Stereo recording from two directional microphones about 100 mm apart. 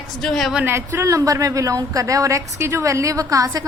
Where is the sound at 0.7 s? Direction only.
25° right (ahead or behind).